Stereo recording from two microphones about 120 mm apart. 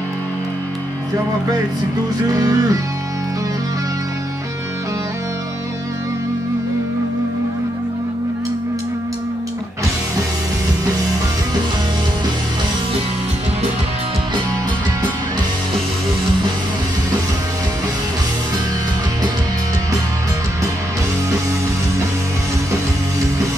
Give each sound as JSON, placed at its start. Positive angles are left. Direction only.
{"t": 2.3, "sound": "music", "side_deg": -30}